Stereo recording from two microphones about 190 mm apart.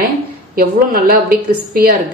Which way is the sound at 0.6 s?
50° right (ahead or behind).